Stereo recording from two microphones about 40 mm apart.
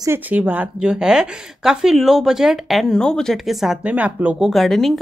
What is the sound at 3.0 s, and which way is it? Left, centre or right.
Speech, centre.